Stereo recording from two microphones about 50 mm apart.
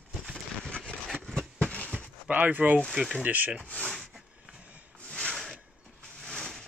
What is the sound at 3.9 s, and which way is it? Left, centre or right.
Rub, centre.